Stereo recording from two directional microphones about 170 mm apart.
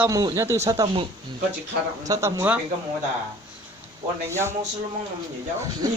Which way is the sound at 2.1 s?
20° right (ahead or behind).